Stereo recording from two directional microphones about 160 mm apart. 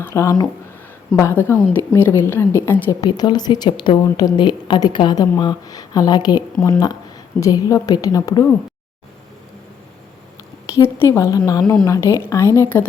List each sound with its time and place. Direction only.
0.0 s a woman's voice: 20° left (ahead or behind)
3.0 s speech: 25° left (ahead or behind)
10.8 s a woman's voice: 15° left (ahead or behind)